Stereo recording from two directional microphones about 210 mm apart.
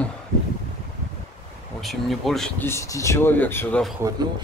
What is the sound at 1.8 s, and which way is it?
Speech, centre (ahead or behind).